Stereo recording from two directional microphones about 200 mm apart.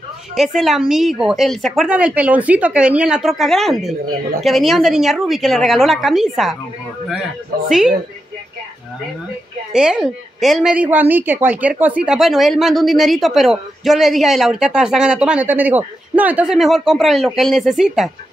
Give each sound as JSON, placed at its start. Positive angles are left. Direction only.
{"t": 0.4, "sound": "a woman's voice", "side_deg": 0}
{"t": 9.7, "sound": "a woman's voice", "side_deg": -5}